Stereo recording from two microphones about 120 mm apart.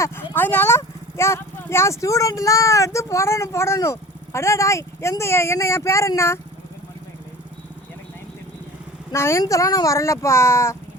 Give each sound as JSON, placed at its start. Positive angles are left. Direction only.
{"t": 0.0, "sound": "speech", "side_deg": 15}
{"t": 9.1, "sound": "speech", "side_deg": 20}